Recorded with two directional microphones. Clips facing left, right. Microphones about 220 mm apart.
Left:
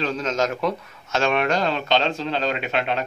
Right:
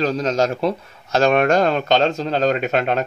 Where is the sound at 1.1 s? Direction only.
45° right (ahead or behind).